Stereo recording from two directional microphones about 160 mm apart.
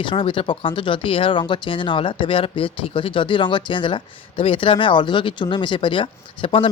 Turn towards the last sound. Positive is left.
turn(degrees=35)  # may be behind; listen again after turning